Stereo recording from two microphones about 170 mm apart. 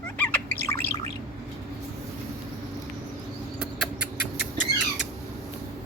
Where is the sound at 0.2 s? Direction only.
10° left (ahead or behind).